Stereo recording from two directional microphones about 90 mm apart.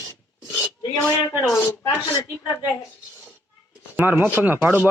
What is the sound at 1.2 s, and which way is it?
Speech, 25° left (ahead or behind).